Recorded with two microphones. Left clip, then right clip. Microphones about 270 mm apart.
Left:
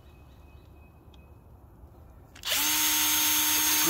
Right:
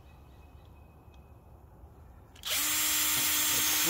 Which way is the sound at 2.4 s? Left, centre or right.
Centre.